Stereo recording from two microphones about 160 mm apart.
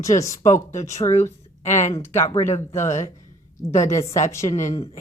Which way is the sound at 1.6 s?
50° left (ahead or behind).